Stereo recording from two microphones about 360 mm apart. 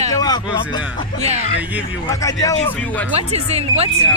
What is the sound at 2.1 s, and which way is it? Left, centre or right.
A man's voice, centre.